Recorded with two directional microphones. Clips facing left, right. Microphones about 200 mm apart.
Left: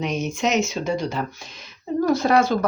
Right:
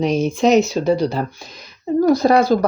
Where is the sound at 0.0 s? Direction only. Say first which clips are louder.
Right 8 dB; 35° right (ahead or behind).